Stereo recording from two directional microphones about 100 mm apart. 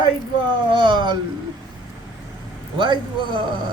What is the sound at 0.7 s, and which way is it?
Speech, 55° right (ahead or behind).